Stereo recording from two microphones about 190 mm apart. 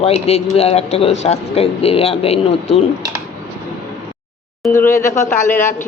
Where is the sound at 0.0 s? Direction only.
35° left (ahead or behind).